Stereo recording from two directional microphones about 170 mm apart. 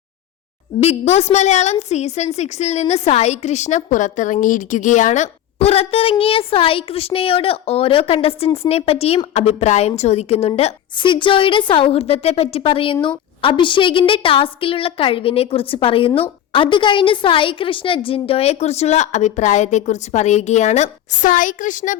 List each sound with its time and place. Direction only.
0.8 s a woman's voice: 40° left (ahead or behind)